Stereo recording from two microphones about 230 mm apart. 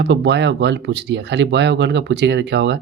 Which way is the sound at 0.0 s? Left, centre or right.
Right.